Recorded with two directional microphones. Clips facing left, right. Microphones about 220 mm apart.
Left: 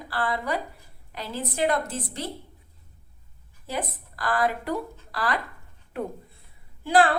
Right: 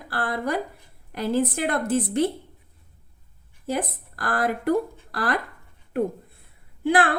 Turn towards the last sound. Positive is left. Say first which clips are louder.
# even
turn(degrees=-55)  # may be behind; listen again after turning